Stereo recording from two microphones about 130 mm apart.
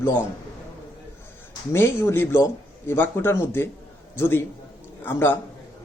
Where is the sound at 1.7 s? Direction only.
20° left (ahead or behind).